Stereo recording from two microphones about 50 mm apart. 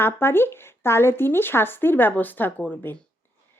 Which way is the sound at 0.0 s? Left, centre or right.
Left.